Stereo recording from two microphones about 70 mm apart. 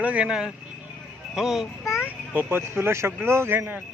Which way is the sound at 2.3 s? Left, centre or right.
Right.